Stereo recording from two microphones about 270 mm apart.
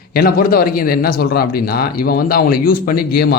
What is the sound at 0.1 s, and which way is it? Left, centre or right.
A man's voice, left.